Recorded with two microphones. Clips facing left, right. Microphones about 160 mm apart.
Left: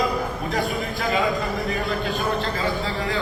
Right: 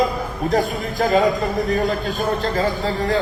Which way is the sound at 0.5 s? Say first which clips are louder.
Right 6 dB; 40° right (ahead or behind).